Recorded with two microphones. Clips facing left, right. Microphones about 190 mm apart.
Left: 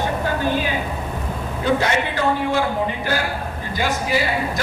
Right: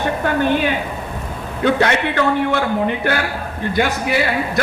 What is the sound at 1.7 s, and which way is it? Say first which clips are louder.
A man's voice: right 4 dB; 65° right (ahead or behind).